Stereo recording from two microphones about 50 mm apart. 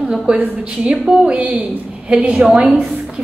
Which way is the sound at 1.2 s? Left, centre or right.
Right.